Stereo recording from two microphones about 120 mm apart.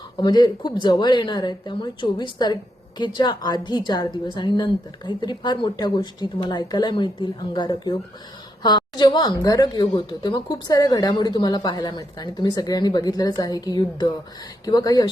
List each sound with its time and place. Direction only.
0.2 s a woman's voice: 35° left (ahead or behind)